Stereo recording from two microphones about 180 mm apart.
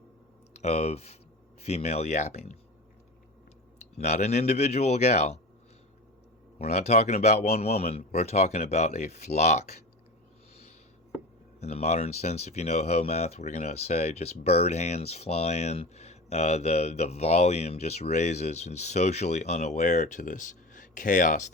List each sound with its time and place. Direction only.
0.5 s speech: 40° left (ahead or behind)
3.8 s speech: 35° left (ahead or behind)
6.6 s speech: 35° left (ahead or behind)
11.6 s speech: 35° left (ahead or behind)